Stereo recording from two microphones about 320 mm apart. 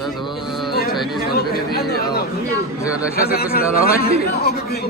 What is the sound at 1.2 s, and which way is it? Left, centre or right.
Speech, left.